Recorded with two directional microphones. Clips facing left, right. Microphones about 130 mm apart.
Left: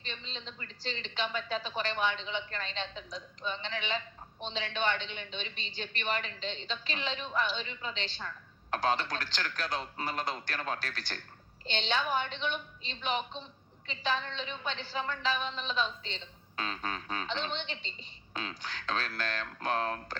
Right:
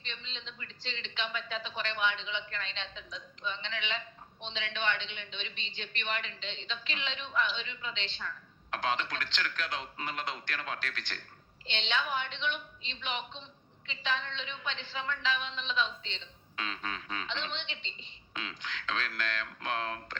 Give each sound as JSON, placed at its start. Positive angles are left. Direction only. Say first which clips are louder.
{"t": 0.0, "sound": "a woman's voice", "louder": "left 3 dB", "side_deg": 40}